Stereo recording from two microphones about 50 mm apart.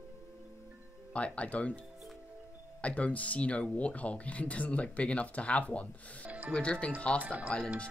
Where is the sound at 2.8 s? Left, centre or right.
Left.